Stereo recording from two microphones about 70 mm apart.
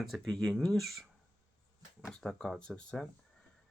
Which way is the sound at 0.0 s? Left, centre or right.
Centre.